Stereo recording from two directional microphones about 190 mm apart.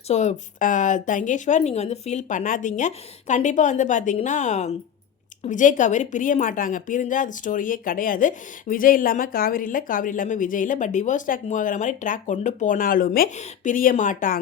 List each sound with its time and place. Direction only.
0.1 s a woman's voice: 40° left (ahead or behind)